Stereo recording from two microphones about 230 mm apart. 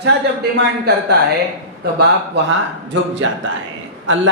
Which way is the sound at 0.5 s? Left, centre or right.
Right.